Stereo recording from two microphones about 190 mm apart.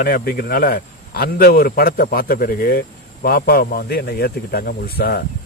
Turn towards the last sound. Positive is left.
turn(degrees=55)  # may be behind; listen again after turning